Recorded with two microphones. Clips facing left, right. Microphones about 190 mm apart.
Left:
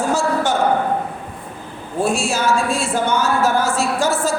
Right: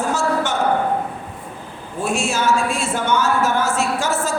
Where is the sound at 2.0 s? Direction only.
30° left (ahead or behind).